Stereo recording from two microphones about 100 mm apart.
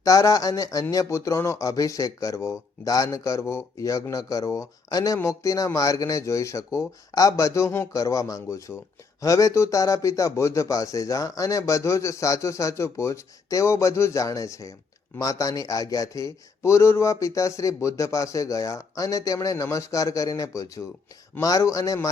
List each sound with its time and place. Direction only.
0.0 s speech: 35° left (ahead or behind)